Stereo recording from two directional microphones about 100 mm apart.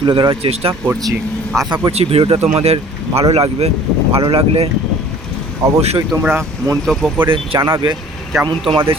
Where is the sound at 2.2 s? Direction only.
75° right (ahead or behind).